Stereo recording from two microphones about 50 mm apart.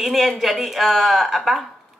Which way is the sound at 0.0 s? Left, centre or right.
Centre.